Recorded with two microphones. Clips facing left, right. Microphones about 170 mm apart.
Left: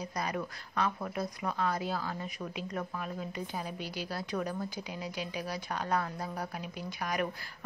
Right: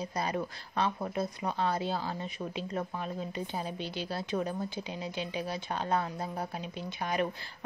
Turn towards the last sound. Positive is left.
turn(degrees=-25)  # may be behind; listen again after turning